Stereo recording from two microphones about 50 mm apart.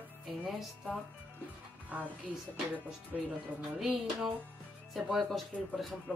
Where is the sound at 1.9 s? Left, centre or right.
Right.